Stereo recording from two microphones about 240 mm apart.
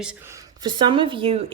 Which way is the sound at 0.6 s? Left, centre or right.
Centre.